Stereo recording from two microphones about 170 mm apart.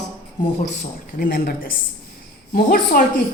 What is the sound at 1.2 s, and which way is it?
A woman's voice, 60° left (ahead or behind).